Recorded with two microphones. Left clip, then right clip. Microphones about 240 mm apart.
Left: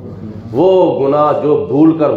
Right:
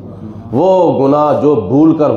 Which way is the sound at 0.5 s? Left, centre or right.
Right.